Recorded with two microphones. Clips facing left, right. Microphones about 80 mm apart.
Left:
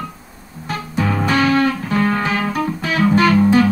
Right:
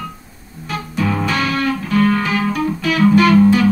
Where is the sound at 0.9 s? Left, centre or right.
Left.